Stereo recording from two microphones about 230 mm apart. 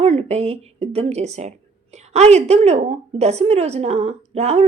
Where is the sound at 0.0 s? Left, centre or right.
Right.